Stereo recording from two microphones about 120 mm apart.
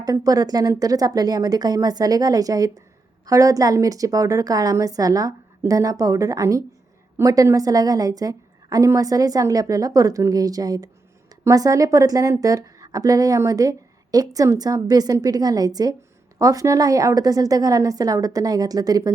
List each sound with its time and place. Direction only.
0.0 s a woman's voice: 30° right (ahead or behind)